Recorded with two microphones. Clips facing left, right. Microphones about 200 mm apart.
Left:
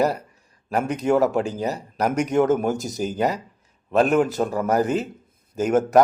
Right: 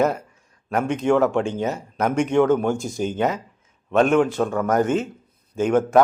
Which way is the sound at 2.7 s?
40° left (ahead or behind).